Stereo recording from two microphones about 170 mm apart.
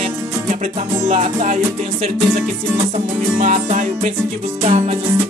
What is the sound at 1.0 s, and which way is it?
Music, 45° right (ahead or behind).